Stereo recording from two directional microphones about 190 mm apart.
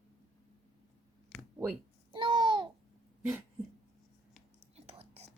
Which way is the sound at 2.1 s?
25° right (ahead or behind).